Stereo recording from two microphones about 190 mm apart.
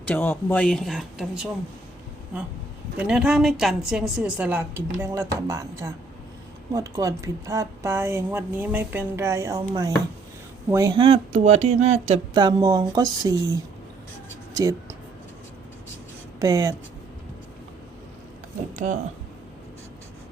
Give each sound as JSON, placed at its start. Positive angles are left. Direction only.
{"t": 0.0, "sound": "speech", "side_deg": 10}
{"t": 3.0, "sound": "speech", "side_deg": -5}
{"t": 12.4, "sound": "speech", "side_deg": -20}
{"t": 14.5, "sound": "speech", "side_deg": -15}
{"t": 16.4, "sound": "speech", "side_deg": -20}